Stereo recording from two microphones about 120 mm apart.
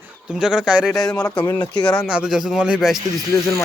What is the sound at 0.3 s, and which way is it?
Speech, 5° right (ahead or behind).